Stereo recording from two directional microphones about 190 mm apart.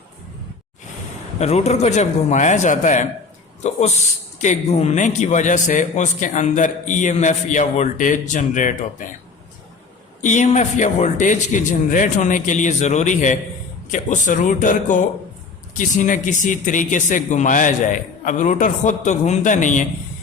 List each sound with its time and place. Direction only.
1.4 s a man's voice: 35° left (ahead or behind)
10.2 s a man's voice: 40° left (ahead or behind)